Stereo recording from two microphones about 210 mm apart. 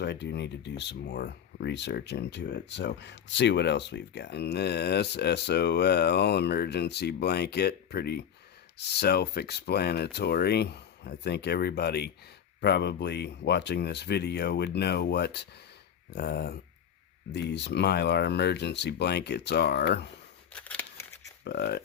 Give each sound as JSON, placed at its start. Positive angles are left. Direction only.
{"t": 0.0, "sound": "speech", "side_deg": 55}
{"t": 20.5, "sound": "scissors", "side_deg": 5}
{"t": 21.4, "sound": "speech", "side_deg": 50}